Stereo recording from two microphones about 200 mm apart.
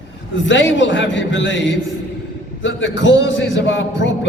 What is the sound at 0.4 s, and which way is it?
A man's voice, 65° left (ahead or behind).